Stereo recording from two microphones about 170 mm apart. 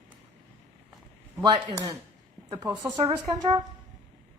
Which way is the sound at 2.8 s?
20° right (ahead or behind).